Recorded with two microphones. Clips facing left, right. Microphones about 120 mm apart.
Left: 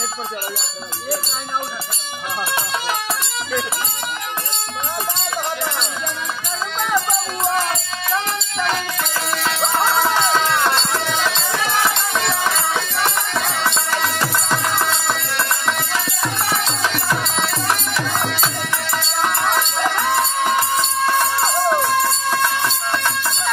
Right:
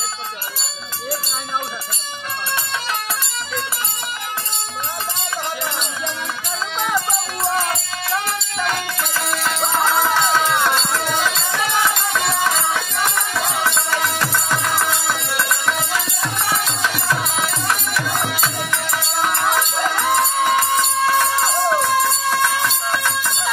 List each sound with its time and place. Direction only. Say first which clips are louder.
8.5 s music: left 1 dB; centre (ahead or behind)
11.2 s music: even; 15° left (ahead or behind)
12.1 s music: even; 5° right (ahead or behind)
12.5 s music: even; 15° left (ahead or behind)
14.2 s music: left 1 dB; 10° left (ahead or behind)
18.0 s music: left 1 dB; 10° right (ahead or behind)
21.2 s music: even; 15° left (ahead or behind)
21.7 s chicken: even; centre (ahead or behind)